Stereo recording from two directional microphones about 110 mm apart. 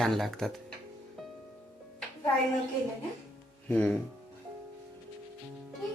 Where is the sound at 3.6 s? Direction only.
10° left (ahead or behind).